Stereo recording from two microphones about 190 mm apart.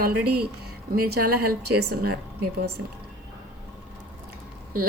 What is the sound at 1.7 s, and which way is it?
Speech, 55° right (ahead or behind).